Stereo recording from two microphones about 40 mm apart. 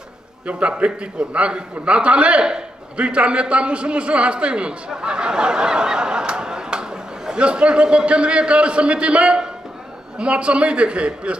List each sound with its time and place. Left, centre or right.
0.5 s a man's voice: right